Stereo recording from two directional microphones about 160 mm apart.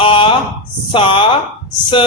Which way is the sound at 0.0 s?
30° left (ahead or behind).